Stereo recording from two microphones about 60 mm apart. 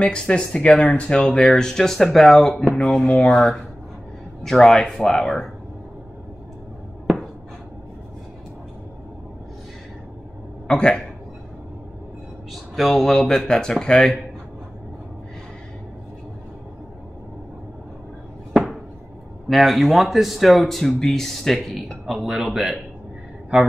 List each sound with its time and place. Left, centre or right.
0.0 s speech: centre
10.7 s a man's voice: centre
12.7 s speech: centre
18.5 s a sound: centre
19.5 s speech: centre